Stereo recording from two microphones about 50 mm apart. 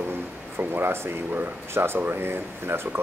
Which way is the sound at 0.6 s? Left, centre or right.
Right.